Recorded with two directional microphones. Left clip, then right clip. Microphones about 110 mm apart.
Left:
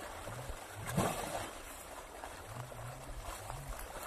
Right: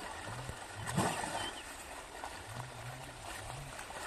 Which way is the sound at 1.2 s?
15° left (ahead or behind).